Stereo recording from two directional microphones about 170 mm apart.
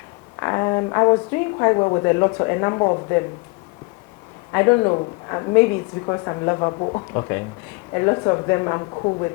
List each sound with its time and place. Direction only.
0.3 s a woman's voice: 20° left (ahead or behind)
4.5 s a woman's voice: 20° left (ahead or behind)